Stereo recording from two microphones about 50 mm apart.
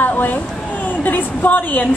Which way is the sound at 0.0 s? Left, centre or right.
Left.